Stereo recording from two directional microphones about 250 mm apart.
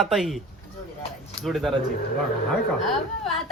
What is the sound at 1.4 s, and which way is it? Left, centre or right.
Speech, centre.